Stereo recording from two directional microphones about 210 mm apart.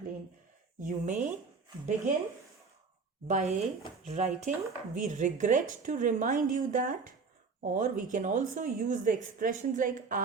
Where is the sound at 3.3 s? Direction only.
35° right (ahead or behind).